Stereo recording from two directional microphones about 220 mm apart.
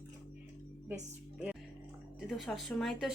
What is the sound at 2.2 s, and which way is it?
Speech, centre (ahead or behind).